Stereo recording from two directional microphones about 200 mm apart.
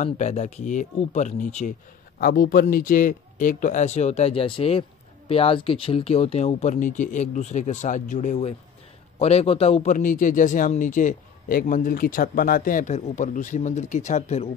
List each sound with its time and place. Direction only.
0.0 s a man's voice: 35° left (ahead or behind)
2.1 s a man's voice: 50° left (ahead or behind); by 14.5 s 35° left (ahead or behind)